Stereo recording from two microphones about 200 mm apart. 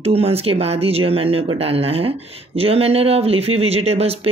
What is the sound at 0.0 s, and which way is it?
Speech, 30° right (ahead or behind).